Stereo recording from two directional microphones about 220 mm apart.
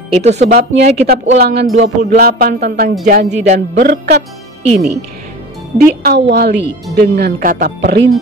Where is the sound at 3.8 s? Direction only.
50° right (ahead or behind).